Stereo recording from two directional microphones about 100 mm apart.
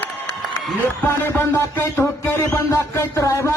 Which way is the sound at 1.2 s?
25° left (ahead or behind).